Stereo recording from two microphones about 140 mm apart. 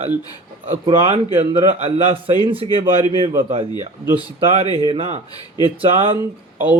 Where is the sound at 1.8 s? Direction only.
45° right (ahead or behind).